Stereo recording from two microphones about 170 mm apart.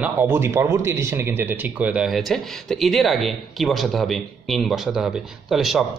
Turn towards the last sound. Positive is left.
turn(degrees=0)  # may be behind; listen again after turning